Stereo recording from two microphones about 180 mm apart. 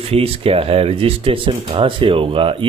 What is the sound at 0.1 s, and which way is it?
Speech, 30° right (ahead or behind).